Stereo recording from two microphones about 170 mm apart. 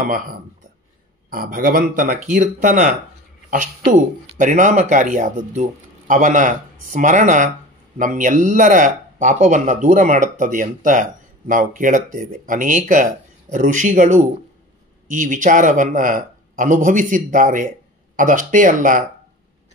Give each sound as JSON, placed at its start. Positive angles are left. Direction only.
{"t": 1.3, "sound": "speech", "side_deg": -55}